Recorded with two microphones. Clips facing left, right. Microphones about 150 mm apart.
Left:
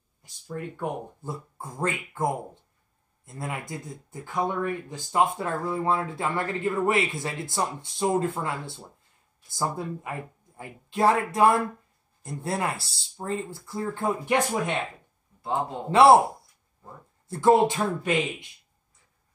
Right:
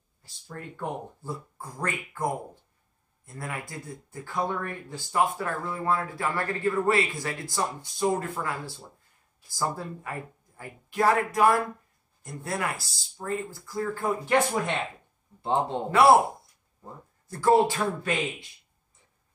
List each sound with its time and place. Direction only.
0.2 s speech: 15° left (ahead or behind)
15.9 s speech: 25° left (ahead or behind)
17.3 s speech: 20° left (ahead or behind)